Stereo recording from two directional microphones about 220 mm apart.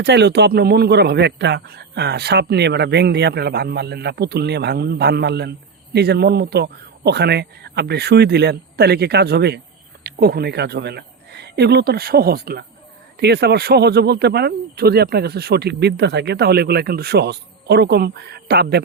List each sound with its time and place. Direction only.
0.0 s speech: 50° right (ahead or behind)